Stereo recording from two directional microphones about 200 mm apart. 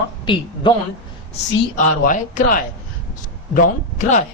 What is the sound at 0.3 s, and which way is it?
Speech, 25° left (ahead or behind).